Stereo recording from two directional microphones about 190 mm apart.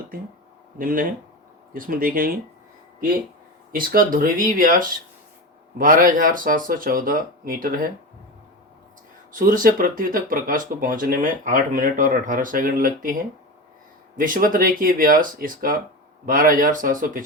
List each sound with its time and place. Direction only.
0.1 s speech: 45° right (ahead or behind)
3.7 s speech: 50° right (ahead or behind)
9.3 s speech: 45° right (ahead or behind)
14.2 s speech: 45° right (ahead or behind)